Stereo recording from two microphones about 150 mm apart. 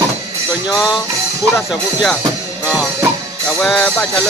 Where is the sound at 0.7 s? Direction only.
5° right (ahead or behind).